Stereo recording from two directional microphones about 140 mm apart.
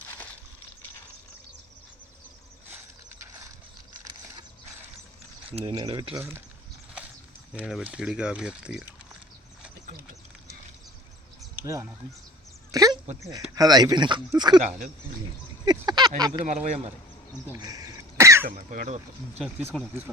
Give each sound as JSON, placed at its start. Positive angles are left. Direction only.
{"t": 5.5, "sound": "speech", "side_deg": -40}
{"t": 7.5, "sound": "speech", "side_deg": -5}
{"t": 11.6, "sound": "speech", "side_deg": -20}
{"t": 12.7, "sound": "dog", "side_deg": -25}
{"t": 13.5, "sound": "speech", "side_deg": -30}
{"t": 15.6, "sound": "a sound", "side_deg": -30}
{"t": 16.4, "sound": "speech", "side_deg": -55}
{"t": 17.6, "sound": "cough", "side_deg": -25}
{"t": 18.5, "sound": "speech", "side_deg": -60}
{"t": 19.7, "sound": "speech", "side_deg": 10}